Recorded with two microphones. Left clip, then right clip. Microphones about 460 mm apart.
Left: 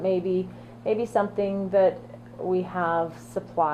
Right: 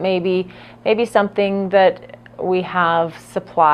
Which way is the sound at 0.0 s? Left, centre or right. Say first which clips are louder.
Right 7 dB; right.